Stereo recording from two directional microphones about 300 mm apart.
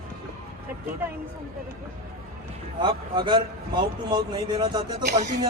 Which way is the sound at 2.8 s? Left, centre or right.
Centre.